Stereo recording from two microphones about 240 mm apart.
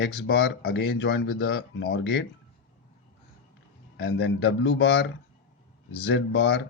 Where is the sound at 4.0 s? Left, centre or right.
Left.